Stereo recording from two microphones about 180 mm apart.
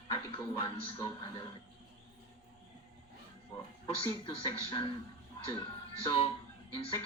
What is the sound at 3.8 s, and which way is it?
Speech, 30° left (ahead or behind).